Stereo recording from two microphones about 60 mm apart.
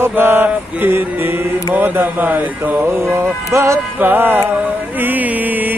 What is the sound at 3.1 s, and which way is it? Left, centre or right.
Music, right.